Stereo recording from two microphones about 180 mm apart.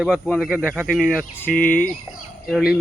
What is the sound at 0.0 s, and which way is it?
Speech, centre (ahead or behind).